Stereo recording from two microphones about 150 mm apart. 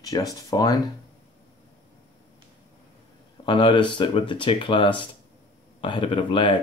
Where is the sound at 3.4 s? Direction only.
35° left (ahead or behind).